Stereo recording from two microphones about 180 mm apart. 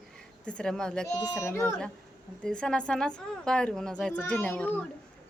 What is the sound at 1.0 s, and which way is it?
A child's voice, 20° left (ahead or behind).